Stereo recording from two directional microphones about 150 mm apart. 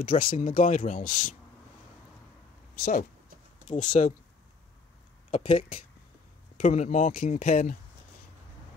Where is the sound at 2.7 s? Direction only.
80° left.